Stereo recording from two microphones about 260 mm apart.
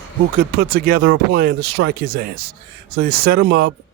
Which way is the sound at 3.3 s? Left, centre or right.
Right.